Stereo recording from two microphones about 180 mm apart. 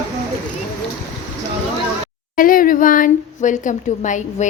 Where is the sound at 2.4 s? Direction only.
50° left (ahead or behind).